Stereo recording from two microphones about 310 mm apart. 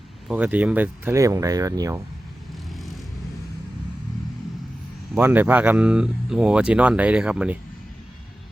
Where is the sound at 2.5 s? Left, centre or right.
Centre.